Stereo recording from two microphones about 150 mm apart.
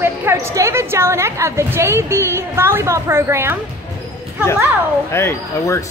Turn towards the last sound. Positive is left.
turn(degrees=20)  # may be behind; listen again after turning